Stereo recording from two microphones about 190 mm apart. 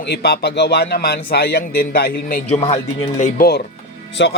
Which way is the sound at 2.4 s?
35° left (ahead or behind).